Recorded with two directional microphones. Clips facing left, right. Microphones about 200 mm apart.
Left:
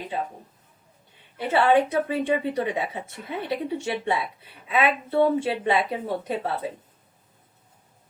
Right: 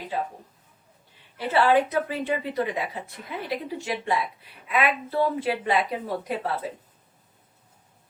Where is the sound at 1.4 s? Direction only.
25° left (ahead or behind).